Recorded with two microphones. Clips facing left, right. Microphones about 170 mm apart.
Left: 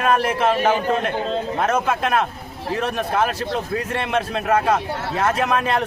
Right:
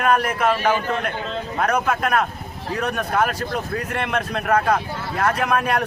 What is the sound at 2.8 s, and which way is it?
Speech, 25° left (ahead or behind).